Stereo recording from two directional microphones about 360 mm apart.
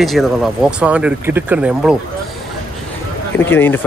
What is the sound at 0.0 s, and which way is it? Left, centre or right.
Speech, centre.